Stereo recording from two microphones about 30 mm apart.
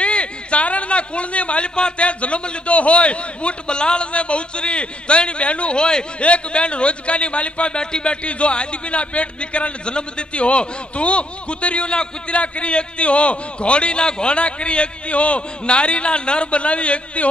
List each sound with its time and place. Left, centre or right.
0.0 s a man's voice: left